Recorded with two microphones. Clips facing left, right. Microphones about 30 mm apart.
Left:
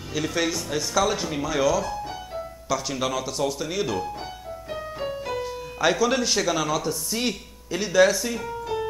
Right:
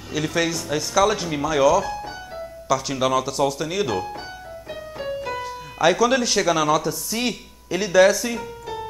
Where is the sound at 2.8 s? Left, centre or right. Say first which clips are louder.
Right 5 dB; centre.